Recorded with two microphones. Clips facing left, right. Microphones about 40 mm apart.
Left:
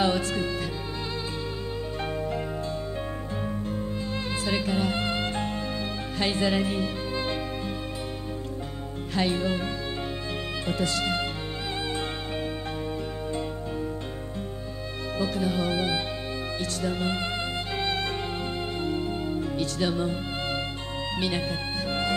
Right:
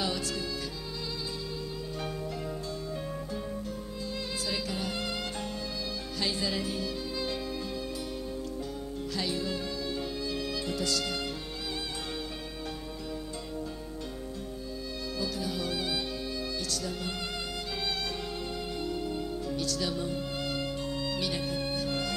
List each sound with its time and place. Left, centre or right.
0.0 s music: left
4.5 s music: left
9.1 s music: left
10.7 s music: left
15.1 s speech: left
16.7 s music: left